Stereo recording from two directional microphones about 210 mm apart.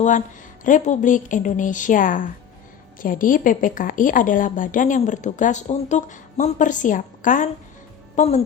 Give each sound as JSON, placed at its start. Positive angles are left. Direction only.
{"t": 0.6, "sound": "speech", "side_deg": 35}